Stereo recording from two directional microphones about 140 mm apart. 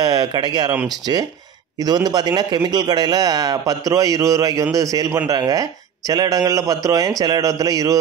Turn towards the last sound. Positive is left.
turn(degrees=-25)  # may be behind; listen again after turning